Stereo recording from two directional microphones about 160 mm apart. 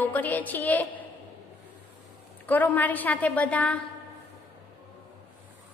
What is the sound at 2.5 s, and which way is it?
A woman's voice, 10° left (ahead or behind).